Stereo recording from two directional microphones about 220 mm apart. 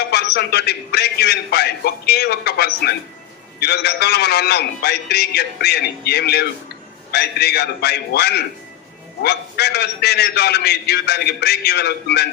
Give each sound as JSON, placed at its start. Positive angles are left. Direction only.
{"t": 0.1, "sound": "a man's voice", "side_deg": 45}